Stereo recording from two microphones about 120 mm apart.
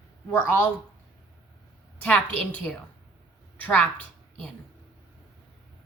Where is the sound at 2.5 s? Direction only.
10° left (ahead or behind).